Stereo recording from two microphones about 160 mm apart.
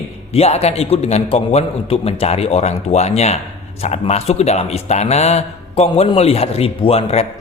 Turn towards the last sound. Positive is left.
turn(degrees=40)  # may be behind; listen again after turning